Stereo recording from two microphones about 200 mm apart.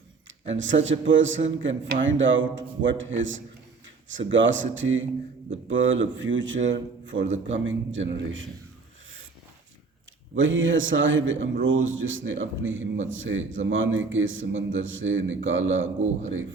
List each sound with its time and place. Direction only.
0.5 s a man's voice: 70° right (ahead or behind)
10.3 s a man's voice: 70° right (ahead or behind)